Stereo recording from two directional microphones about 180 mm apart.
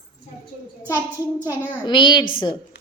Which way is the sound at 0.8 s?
15° left (ahead or behind).